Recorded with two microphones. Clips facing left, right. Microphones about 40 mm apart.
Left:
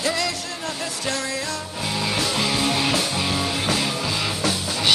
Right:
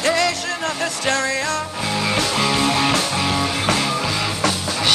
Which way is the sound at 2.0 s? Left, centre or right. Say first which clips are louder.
Right 4 dB; right.